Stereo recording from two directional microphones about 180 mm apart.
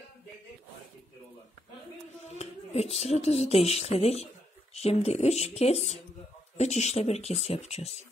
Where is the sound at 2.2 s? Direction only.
35° left (ahead or behind).